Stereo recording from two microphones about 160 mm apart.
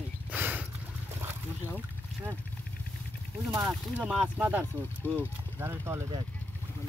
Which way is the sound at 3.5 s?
10° right (ahead or behind).